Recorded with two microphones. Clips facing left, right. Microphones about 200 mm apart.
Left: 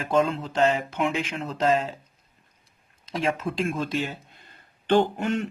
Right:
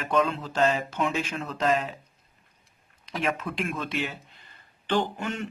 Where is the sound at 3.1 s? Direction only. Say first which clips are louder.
Left 3 dB; 30° left (ahead or behind).